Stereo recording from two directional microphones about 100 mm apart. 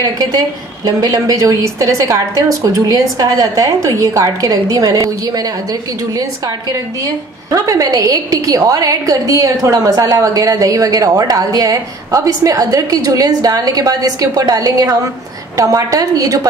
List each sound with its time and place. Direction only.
0.0 s a woman's voice: 35° right (ahead or behind)
6.7 s a woman's voice: 35° right (ahead or behind)